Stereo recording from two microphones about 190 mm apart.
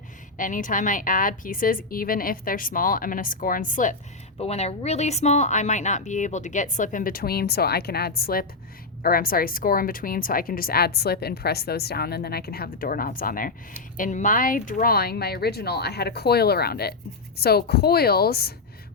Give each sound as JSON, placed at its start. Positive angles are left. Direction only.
{"t": 0.3, "sound": "speech", "side_deg": 45}
{"t": 4.4, "sound": "speech", "side_deg": 35}